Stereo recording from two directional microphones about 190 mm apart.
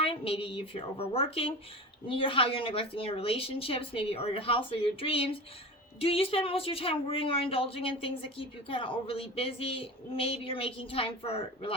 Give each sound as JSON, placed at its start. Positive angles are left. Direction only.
{"t": 0.0, "sound": "a woman's voice", "side_deg": 30}